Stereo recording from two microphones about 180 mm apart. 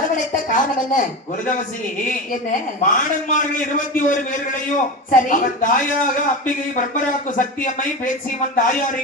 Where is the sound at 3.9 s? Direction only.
45° left (ahead or behind).